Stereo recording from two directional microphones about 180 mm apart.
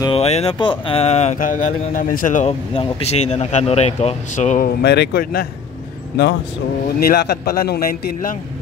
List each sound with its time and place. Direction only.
0.0 s speech: 35° left (ahead or behind)
2.7 s speech: 35° left (ahead or behind); by 5.5 s 55° left (ahead or behind)
7.0 s a man's voice: 60° left (ahead or behind)